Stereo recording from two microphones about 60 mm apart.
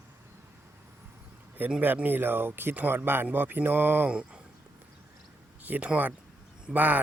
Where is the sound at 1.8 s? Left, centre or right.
Right.